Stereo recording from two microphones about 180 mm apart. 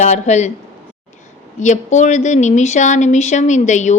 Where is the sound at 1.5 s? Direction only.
40° left (ahead or behind).